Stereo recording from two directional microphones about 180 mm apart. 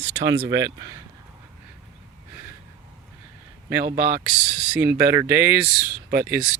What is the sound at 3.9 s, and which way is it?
Speech, 5° right (ahead or behind).